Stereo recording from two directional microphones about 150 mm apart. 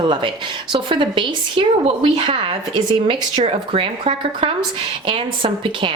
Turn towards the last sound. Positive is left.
turn(degrees=-35)  # may be behind; listen again after turning